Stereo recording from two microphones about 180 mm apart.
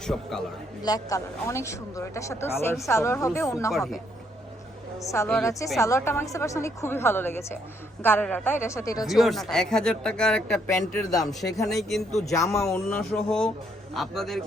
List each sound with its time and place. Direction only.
0.0 s speech: centre (ahead or behind)
0.8 s speech: 20° left (ahead or behind)
3.7 s speech: centre (ahead or behind)
4.9 s speech: 15° left (ahead or behind)
9.0 s speech: centre (ahead or behind)
10.7 s speech: 20° left (ahead or behind)
11.7 s speech: centre (ahead or behind)